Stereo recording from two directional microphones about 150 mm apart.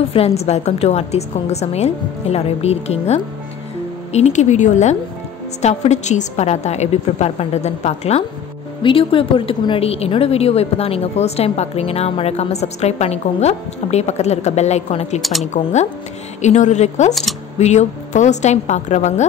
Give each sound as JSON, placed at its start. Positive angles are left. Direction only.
{"t": 0.1, "sound": "a woman's voice", "side_deg": 45}
{"t": 17.1, "sound": "speech", "side_deg": 0}
{"t": 17.6, "sound": "a woman's voice", "side_deg": 50}